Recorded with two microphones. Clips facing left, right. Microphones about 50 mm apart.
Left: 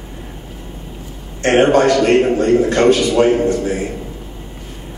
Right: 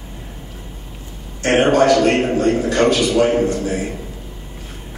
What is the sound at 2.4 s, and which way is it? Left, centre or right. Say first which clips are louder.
A man's voice: left 3 dB; left.